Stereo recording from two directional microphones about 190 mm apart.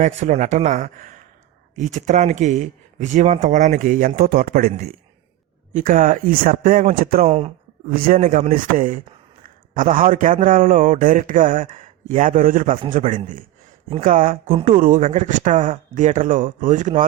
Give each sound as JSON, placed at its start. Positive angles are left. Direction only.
{"t": 0.0, "sound": "a man's voice", "side_deg": -40}
{"t": 7.3, "sound": "speech", "side_deg": -30}
{"t": 7.9, "sound": "a man's voice", "side_deg": -50}
{"t": 8.2, "sound": "a man's voice", "side_deg": -35}